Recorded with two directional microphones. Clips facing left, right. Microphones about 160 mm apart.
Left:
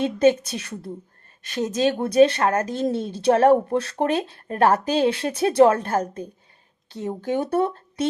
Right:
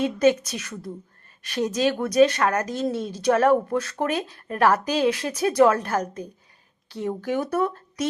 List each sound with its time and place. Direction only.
0.0 s speech: 30° left (ahead or behind)